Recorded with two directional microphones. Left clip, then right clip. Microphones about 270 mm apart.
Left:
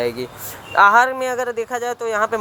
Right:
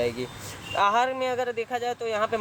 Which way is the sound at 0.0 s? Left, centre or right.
Centre.